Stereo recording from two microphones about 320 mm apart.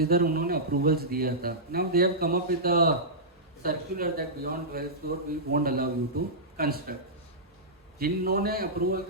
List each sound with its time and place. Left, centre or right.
0.0 s a man's voice: right
7.9 s a man's voice: right